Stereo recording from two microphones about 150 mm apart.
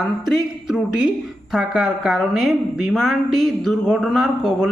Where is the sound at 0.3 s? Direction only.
Centre (ahead or behind).